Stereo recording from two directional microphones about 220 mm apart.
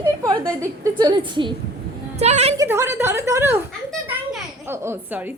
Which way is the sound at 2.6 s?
10° right (ahead or behind).